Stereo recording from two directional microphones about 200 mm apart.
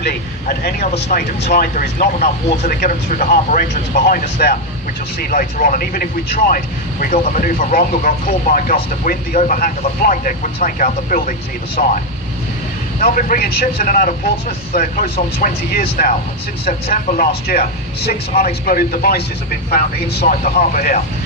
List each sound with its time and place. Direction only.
0.0 s speech: 50° left (ahead or behind)
13.0 s speech: 45° left (ahead or behind)
20.2 s speech: 35° left (ahead or behind)